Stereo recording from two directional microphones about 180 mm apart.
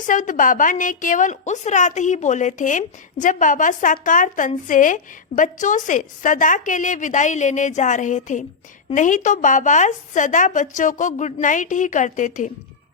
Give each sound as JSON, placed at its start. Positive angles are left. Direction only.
{"t": 0.1, "sound": "a woman's voice", "side_deg": 45}